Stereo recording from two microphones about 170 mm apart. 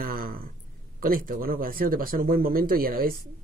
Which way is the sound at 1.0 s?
55° right (ahead or behind).